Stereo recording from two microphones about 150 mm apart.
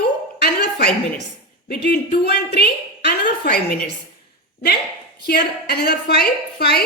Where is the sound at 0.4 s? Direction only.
90° left.